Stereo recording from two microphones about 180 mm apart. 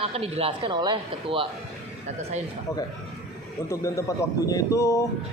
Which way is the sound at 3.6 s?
15° left (ahead or behind).